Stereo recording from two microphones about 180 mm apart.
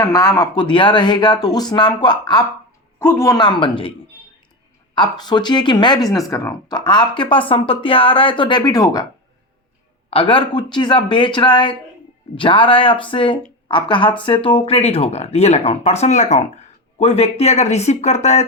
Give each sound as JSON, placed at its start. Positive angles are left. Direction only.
{"t": 0.0, "sound": "speech", "side_deg": 20}
{"t": 3.0, "sound": "speech", "side_deg": 15}
{"t": 4.9, "sound": "speech", "side_deg": 25}
{"t": 10.1, "sound": "speech", "side_deg": 30}